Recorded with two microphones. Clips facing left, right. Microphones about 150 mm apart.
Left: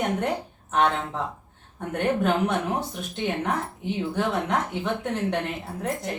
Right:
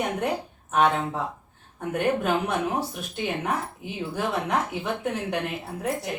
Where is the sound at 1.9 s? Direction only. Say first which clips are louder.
Even; 5° right (ahead or behind).